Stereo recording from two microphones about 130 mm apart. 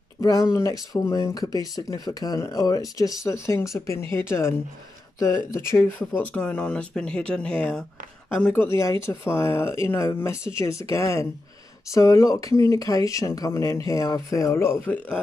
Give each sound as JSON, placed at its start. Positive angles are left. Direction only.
{"t": 0.2, "sound": "speech", "side_deg": 30}